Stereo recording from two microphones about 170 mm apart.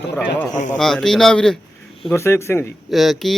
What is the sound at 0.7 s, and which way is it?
Speech, 5° left (ahead or behind).